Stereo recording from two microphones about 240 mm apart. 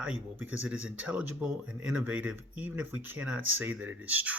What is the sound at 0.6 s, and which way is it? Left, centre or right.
Speech, centre.